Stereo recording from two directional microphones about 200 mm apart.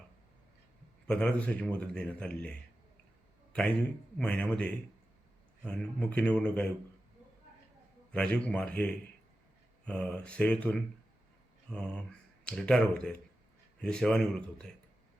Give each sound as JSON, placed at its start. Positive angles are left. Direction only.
{"t": 1.0, "sound": "speech", "side_deg": 5}
{"t": 8.1, "sound": "speech", "side_deg": 5}